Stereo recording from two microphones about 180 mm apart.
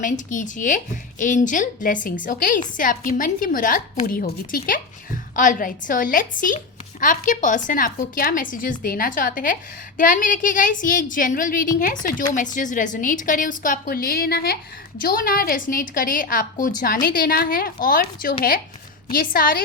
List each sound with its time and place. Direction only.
0.0 s a woman's voice: 45° left (ahead or behind)